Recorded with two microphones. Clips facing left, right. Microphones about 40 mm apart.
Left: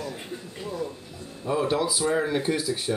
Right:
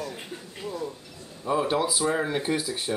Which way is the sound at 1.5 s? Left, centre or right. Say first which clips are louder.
Even; centre.